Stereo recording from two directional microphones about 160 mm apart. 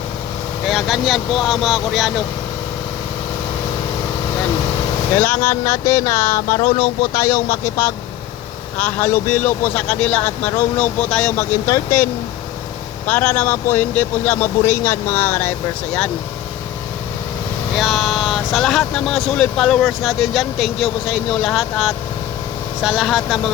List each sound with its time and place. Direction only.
0.7 s speech: centre (ahead or behind)
5.1 s speech: 10° left (ahead or behind)
13.1 s speech: 10° left (ahead or behind)
17.7 s speech: centre (ahead or behind)